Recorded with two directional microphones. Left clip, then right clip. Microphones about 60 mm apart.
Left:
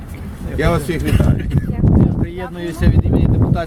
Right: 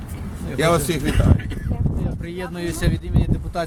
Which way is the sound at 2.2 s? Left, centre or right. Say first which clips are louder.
Left 5 dB; right.